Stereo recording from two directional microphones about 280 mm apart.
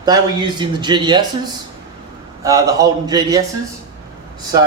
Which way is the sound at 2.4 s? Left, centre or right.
Centre.